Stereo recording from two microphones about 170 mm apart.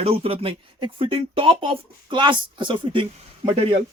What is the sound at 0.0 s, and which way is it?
Speech, 35° right (ahead or behind).